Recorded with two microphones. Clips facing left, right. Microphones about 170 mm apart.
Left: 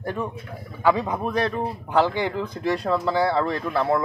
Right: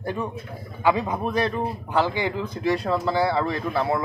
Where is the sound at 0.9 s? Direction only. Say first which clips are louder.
Even; 5° right (ahead or behind).